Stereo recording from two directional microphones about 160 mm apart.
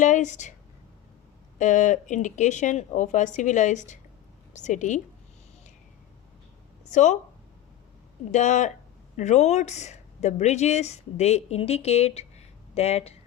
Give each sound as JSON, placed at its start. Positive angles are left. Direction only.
{"t": 0.0, "sound": "speech", "side_deg": 50}
{"t": 1.5, "sound": "speech", "side_deg": 50}
{"t": 6.8, "sound": "a woman's voice", "side_deg": 50}
{"t": 8.3, "sound": "speech", "side_deg": 50}